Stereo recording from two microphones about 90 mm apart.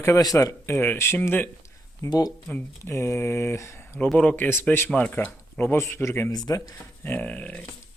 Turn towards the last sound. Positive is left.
turn(degrees=15)  # may be behind; listen again after turning